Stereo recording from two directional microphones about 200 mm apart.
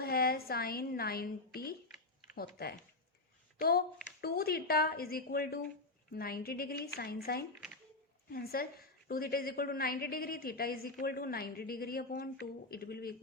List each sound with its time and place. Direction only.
0.0 s a woman's voice: 50° left (ahead or behind)
2.3 s a woman's voice: 50° left (ahead or behind)